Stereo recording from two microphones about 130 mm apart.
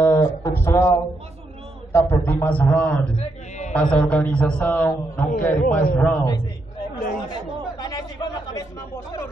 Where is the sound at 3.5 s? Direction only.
65° left (ahead or behind).